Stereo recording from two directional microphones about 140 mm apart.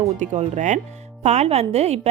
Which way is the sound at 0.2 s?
60° right (ahead or behind).